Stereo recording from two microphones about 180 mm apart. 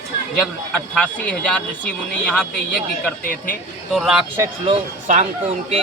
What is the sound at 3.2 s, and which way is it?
Speech, 50° left (ahead or behind).